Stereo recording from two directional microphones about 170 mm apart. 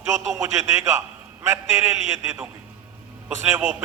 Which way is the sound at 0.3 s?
15° right (ahead or behind).